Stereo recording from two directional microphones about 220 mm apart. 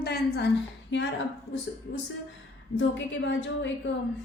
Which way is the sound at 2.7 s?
55° left (ahead or behind).